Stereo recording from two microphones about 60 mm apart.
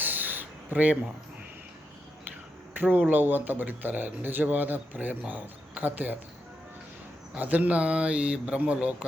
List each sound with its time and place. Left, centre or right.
0.0 s a sound: right
2.7 s speech: right
7.3 s a man's voice: right